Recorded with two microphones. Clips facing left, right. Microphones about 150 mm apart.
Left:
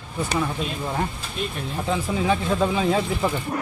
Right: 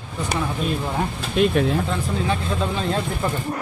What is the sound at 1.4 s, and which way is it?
Speech, 90° right.